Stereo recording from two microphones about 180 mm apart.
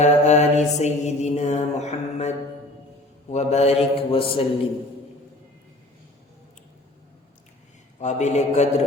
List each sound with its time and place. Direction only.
0.0 s mantra: 40° left (ahead or behind)
0.8 s music: 40° left (ahead or behind)
3.3 s music: 35° left (ahead or behind)
7.9 s music: 40° left (ahead or behind)